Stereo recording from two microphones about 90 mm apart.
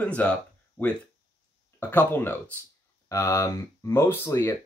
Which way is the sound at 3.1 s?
35° left (ahead or behind).